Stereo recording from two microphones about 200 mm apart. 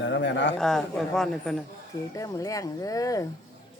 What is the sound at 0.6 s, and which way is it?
A man's voice, centre (ahead or behind).